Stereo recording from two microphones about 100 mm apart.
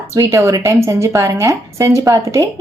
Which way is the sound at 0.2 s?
30° right (ahead or behind).